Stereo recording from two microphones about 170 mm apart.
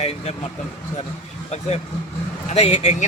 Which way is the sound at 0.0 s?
40° left (ahead or behind).